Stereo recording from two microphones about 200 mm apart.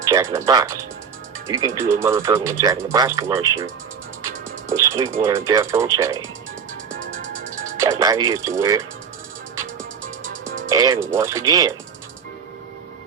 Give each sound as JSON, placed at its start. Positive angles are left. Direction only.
{"t": 0.1, "sound": "speech", "side_deg": -15}
{"t": 4.9, "sound": "speech", "side_deg": -15}
{"t": 7.8, "sound": "speech", "side_deg": -15}
{"t": 10.7, "sound": "speech", "side_deg": -20}